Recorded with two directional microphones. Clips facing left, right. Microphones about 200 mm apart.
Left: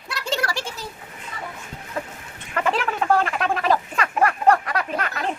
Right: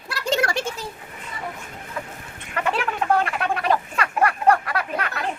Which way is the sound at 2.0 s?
40° left (ahead or behind).